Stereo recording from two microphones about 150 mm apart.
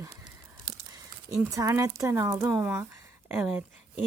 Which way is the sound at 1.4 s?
20° right (ahead or behind).